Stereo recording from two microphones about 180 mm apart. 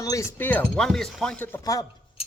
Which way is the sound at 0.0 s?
20° left (ahead or behind).